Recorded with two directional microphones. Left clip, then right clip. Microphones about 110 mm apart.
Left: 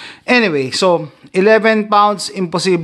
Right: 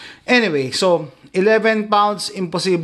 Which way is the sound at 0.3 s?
30° left (ahead or behind).